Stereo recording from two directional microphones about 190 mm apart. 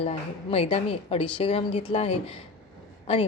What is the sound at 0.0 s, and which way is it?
A woman's voice, 30° left (ahead or behind).